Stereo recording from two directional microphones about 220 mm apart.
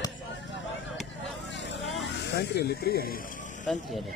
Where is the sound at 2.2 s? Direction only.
50° left (ahead or behind).